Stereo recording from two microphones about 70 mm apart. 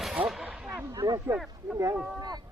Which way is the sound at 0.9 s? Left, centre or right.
Right.